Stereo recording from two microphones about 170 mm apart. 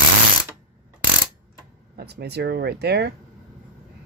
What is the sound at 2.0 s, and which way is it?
Speech, 70° right (ahead or behind).